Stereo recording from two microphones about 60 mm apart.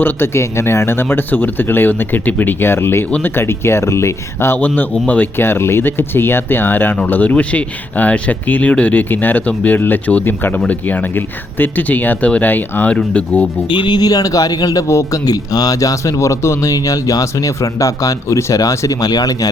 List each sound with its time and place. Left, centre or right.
0.0 s speech: left
4.5 s speech: left
5.4 s speech: left
12.9 s speech: left
14.0 s a man's voice: left
14.8 s speech: left
15.2 s speech: left